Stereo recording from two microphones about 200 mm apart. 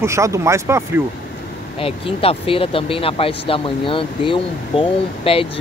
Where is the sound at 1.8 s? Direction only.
30° left (ahead or behind).